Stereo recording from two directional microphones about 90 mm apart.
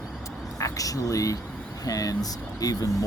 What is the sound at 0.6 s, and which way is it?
Speech, 40° left (ahead or behind).